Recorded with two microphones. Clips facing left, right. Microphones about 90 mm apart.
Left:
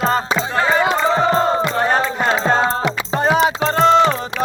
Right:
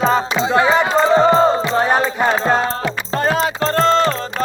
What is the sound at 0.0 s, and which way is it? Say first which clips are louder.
Music: right 2 dB; centre (ahead or behind).